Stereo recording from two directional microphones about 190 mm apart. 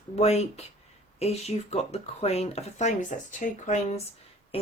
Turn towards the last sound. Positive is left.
turn(degrees=30)  # may be behind; listen again after turning